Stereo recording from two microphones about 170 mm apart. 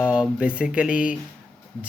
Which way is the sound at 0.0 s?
5° right (ahead or behind).